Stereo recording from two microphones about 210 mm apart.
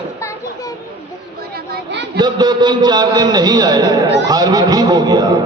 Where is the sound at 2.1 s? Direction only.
20° right (ahead or behind).